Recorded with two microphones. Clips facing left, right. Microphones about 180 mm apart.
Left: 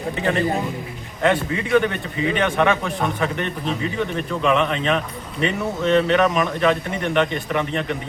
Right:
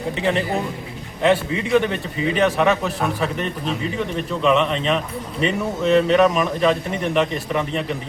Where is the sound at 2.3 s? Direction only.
5° right (ahead or behind).